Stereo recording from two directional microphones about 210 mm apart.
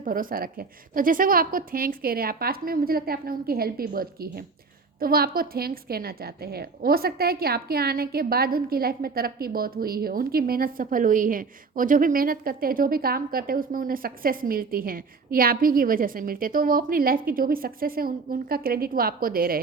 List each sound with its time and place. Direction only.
0.0 s a woman's voice: 40° right (ahead or behind)